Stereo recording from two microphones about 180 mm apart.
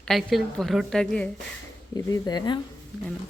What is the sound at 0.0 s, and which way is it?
A woman's voice, centre (ahead or behind).